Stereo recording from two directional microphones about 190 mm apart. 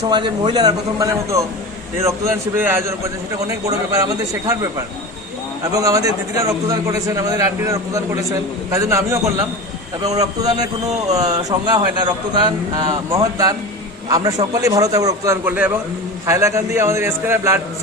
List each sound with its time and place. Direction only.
0.0 s a man's voice: 25° right (ahead or behind)
5.7 s a man's voice: 20° right (ahead or behind)